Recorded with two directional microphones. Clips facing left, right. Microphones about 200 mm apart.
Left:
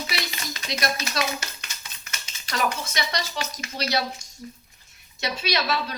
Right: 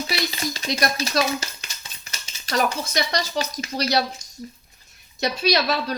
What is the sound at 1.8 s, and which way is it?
Speech, 30° right (ahead or behind).